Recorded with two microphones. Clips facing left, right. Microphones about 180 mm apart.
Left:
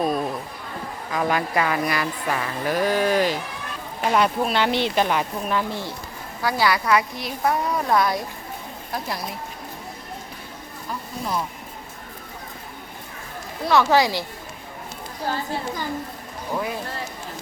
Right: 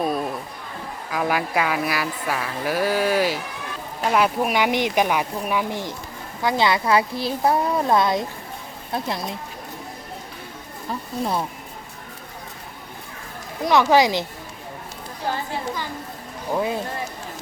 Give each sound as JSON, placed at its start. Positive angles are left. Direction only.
{"t": 0.0, "sound": "a sound", "side_deg": 0}
{"t": 1.1, "sound": "a woman's voice", "side_deg": -5}
{"t": 13.7, "sound": "speech", "side_deg": -15}
{"t": 16.5, "sound": "a woman's voice", "side_deg": -20}